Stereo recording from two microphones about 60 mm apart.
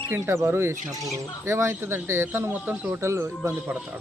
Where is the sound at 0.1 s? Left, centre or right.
Right.